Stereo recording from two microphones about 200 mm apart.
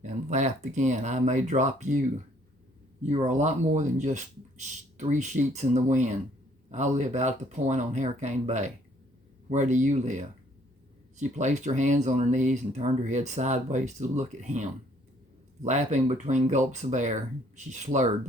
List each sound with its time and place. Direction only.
0.0 s speech: 35° right (ahead or behind)